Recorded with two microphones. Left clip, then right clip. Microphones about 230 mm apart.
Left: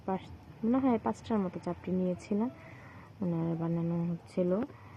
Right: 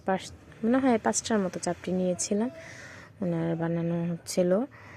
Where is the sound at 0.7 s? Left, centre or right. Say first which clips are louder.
Right 5 dB; right.